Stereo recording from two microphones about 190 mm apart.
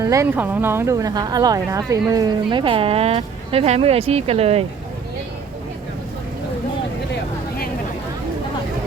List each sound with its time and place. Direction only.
0.0 s speech: 15° right (ahead or behind); by 4.6 s 30° right (ahead or behind)
7.1 s vehicle: 50° left (ahead or behind)